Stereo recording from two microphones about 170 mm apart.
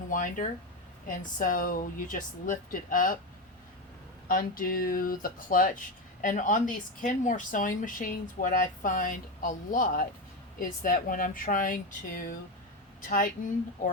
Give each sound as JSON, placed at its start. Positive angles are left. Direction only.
{"t": 0.1, "sound": "speech", "side_deg": 50}
{"t": 4.3, "sound": "speech", "side_deg": 55}